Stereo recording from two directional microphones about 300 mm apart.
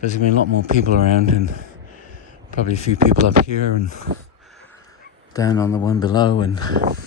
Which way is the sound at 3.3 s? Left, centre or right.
Right.